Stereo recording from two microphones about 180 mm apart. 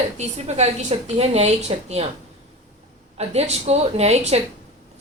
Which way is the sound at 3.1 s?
35° right (ahead or behind).